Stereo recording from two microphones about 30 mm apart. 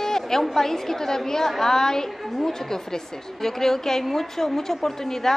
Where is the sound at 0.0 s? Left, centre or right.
Centre.